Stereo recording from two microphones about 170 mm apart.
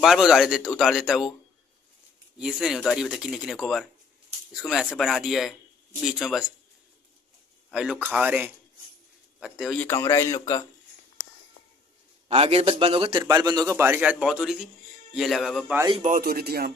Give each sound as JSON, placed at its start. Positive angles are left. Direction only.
{"t": 0.0, "sound": "speech", "side_deg": 0}
{"t": 2.3, "sound": "speech", "side_deg": -5}
{"t": 7.7, "sound": "speech", "side_deg": -5}
{"t": 9.8, "sound": "a man's voice", "side_deg": 15}
{"t": 12.3, "sound": "a man's voice", "side_deg": -35}
{"t": 16.0, "sound": "speech", "side_deg": -50}